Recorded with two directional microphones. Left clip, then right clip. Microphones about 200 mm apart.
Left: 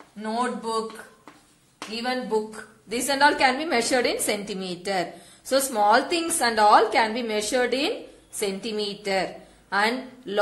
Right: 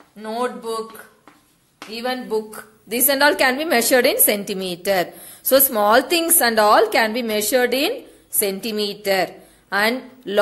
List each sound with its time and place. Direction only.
0.2 s a woman's voice: 40° right (ahead or behind)
2.0 s a woman's voice: 45° right (ahead or behind)